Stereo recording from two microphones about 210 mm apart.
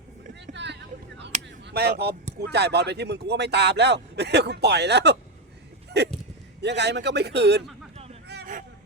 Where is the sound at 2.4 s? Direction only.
50° right (ahead or behind).